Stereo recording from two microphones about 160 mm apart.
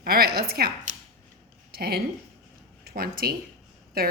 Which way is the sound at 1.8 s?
75° right (ahead or behind).